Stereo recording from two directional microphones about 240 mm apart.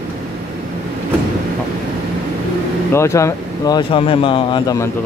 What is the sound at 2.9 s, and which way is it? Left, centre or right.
Speech, centre.